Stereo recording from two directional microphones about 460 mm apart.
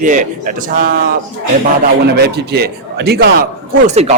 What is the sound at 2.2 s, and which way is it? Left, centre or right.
A man's voice, right.